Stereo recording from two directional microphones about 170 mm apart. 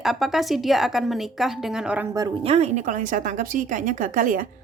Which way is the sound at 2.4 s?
35° right (ahead or behind).